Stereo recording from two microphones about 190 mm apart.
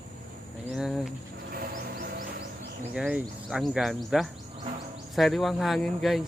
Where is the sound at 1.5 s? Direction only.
50° right (ahead or behind).